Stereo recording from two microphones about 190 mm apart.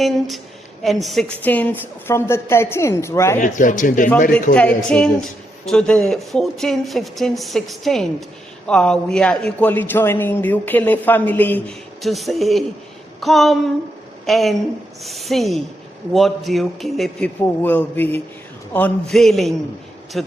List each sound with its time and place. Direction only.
0.8 s a woman's voice: centre (ahead or behind)
3.4 s speech: 45° left (ahead or behind)
4.5 s a woman's voice: 5° left (ahead or behind)
13.1 s a sound: centre (ahead or behind)
14.3 s speech: centre (ahead or behind)